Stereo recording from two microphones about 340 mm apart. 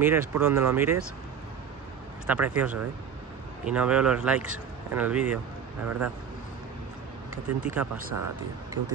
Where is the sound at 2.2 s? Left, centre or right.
Centre.